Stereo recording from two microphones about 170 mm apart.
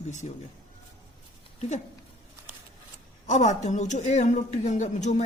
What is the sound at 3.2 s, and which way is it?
A woman's voice, 45° left (ahead or behind).